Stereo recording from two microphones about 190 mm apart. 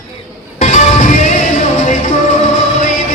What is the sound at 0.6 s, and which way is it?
Music, 40° left (ahead or behind).